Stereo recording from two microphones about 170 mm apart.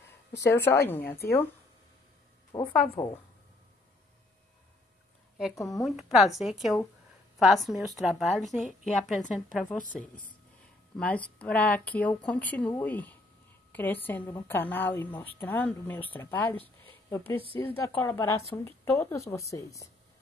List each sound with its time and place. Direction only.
0.0 s a woman's voice: 15° left (ahead or behind)
2.5 s speech: 30° left (ahead or behind)
3.0 s a woman's voice: 20° left (ahead or behind)
6.0 s a woman's voice: centre (ahead or behind)
17.4 s speech: 30° left (ahead or behind)
17.8 s a woman's voice: 15° left (ahead or behind)